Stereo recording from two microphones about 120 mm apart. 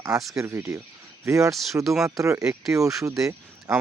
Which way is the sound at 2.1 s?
25° right (ahead or behind).